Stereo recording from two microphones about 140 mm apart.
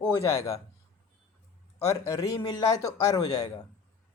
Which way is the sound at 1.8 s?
25° left (ahead or behind).